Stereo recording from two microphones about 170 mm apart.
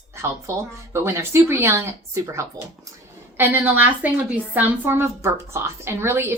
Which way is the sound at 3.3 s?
10° right (ahead or behind).